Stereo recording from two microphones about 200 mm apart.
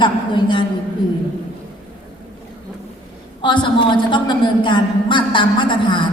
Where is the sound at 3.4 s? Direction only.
25° left (ahead or behind).